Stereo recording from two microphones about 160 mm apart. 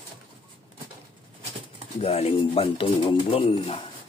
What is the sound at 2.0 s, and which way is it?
Speech, 40° left (ahead or behind).